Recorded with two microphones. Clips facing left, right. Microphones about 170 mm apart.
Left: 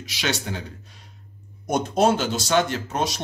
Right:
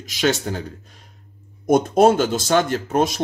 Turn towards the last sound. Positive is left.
turn(degrees=-50)  # may be behind; listen again after turning